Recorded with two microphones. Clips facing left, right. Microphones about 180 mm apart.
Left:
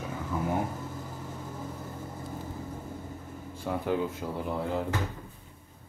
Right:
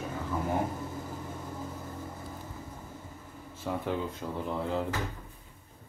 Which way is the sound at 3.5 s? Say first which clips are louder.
Left 3 dB; centre (ahead or behind).